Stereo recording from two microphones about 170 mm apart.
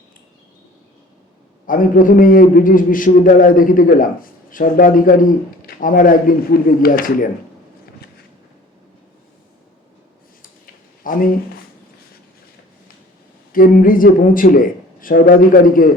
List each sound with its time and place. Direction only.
1.6 s a man's voice: 55° left (ahead or behind)
11.0 s speech: 55° left (ahead or behind)
13.5 s speech: 55° left (ahead or behind)